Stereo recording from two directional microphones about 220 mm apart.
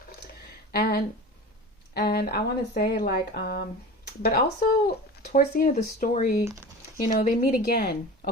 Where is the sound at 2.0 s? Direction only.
45° left (ahead or behind).